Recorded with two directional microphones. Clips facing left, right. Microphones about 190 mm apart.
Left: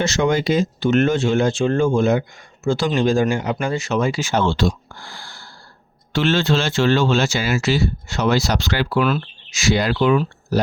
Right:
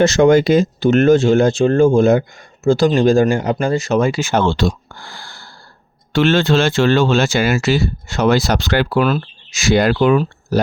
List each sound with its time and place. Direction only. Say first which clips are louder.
0.0 s speech: right 8 dB; 50° right (ahead or behind)